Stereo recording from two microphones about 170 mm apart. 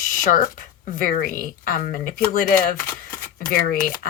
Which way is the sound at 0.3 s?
50° left (ahead or behind).